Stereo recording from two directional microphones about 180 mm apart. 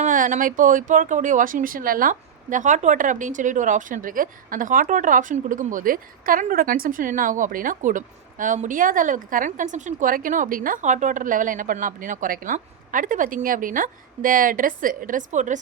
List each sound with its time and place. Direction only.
0.0 s speech: 45° right (ahead or behind)